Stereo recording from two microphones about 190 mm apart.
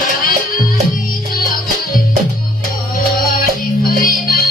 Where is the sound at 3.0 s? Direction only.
50° left (ahead or behind).